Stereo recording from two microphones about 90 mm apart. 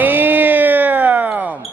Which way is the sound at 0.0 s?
20° right (ahead or behind).